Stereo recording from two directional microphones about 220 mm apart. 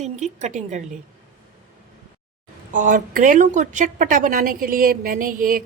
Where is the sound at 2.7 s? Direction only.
35° right (ahead or behind).